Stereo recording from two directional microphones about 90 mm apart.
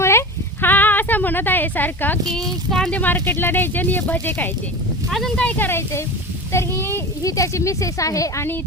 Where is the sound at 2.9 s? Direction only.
20° left (ahead or behind); by 8.4 s 35° left (ahead or behind).